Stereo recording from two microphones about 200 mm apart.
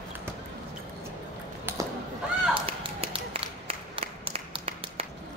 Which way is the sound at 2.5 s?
30° right (ahead or behind).